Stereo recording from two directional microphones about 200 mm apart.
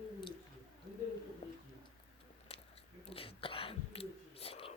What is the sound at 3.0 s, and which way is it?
Whispering, 30° left (ahead or behind).